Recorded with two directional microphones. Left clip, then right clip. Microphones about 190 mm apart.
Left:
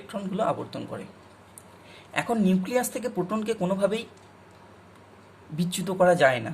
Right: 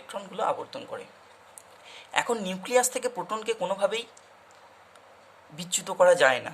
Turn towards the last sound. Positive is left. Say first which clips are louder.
# even
turn(degrees=-20)  # may be behind; listen again after turning